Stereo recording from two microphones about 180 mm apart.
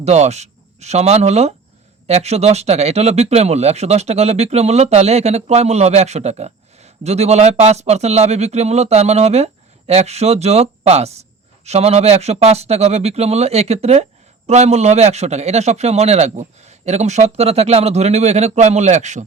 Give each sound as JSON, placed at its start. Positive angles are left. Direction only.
{"t": 0.0, "sound": "speech", "side_deg": -40}